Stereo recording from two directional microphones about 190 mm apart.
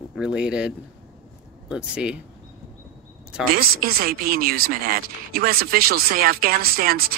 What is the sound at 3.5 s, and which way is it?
Speech, 50° right (ahead or behind).